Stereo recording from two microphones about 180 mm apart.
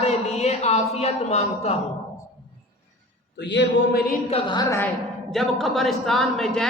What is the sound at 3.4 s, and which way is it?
Speech, 75° left (ahead or behind).